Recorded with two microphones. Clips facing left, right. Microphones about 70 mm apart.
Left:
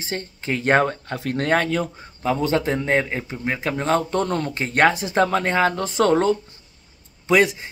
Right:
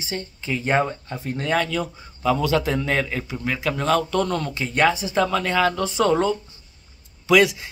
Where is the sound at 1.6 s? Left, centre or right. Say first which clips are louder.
Left 2 dB; left.